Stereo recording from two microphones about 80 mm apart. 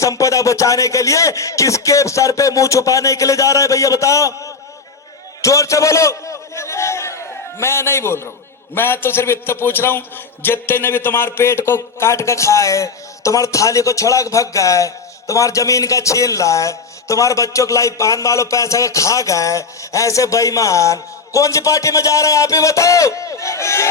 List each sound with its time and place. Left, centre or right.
0.0 s speech: left
5.4 s a sound: left
7.6 s a man's voice: left